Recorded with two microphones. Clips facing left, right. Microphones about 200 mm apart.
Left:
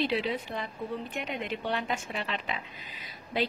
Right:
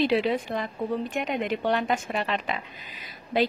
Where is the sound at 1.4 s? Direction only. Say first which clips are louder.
Right 7 dB; 90° right.